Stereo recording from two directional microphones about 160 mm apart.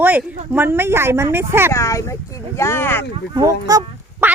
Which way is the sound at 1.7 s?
20° left (ahead or behind).